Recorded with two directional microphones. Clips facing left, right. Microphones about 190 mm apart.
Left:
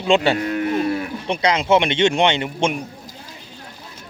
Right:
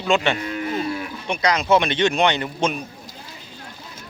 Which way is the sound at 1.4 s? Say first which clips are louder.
Left 1 dB; 25° left (ahead or behind).